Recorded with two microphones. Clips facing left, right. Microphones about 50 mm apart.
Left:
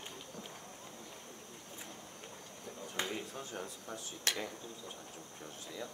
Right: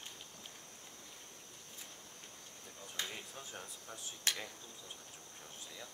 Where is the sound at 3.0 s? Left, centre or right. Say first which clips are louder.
Left 5 dB; left.